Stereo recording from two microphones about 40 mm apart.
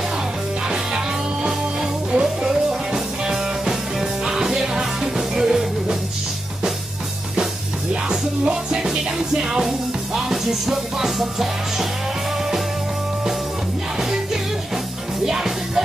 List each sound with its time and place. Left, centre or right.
0.7 s music: centre
7.9 s music: right; by 11.9 s centre
15.2 s music: centre